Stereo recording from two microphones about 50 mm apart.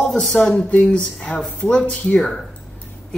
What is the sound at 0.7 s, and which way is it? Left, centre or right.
Speech, left.